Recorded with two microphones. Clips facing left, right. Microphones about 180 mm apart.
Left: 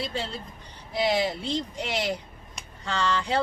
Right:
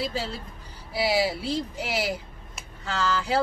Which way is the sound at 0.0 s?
5° right (ahead or behind).